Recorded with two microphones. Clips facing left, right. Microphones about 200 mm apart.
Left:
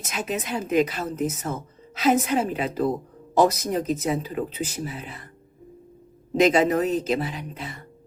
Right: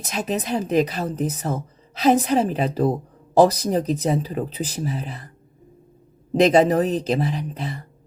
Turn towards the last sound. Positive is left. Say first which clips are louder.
# right 6 dB
turn(degrees=-35)  # may be behind; listen again after turning